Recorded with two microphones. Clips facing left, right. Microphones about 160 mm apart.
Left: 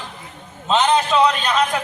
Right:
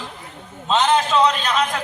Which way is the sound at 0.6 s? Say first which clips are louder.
Left 1 dB; centre (ahead or behind).